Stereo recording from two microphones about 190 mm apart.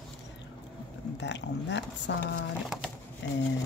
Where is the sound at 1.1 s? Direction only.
65° left (ahead or behind).